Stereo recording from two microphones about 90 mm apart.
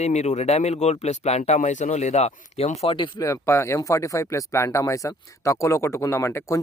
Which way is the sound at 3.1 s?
35° left (ahead or behind).